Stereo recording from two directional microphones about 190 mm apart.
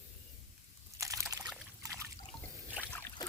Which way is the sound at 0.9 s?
15° right (ahead or behind).